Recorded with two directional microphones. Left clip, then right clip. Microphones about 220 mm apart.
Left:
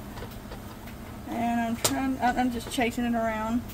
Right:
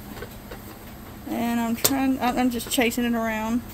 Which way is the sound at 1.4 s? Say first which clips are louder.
Right 1 dB; 45° right (ahead or behind).